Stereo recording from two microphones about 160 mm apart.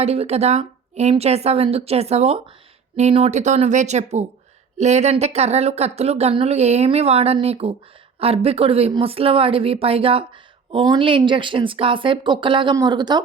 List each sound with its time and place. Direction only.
0.0 s speech: 40° right (ahead or behind)